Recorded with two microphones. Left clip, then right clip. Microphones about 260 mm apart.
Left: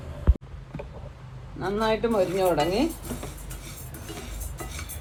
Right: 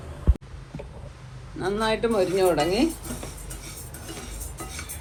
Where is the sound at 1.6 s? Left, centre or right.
Right.